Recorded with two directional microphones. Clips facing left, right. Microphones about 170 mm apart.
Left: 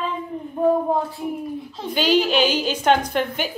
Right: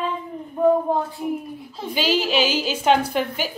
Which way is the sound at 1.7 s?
5° right (ahead or behind).